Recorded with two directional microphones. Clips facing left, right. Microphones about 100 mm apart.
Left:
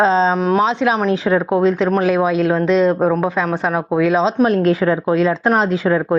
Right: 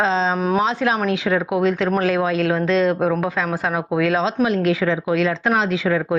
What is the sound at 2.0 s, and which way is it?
Speech, 15° left (ahead or behind).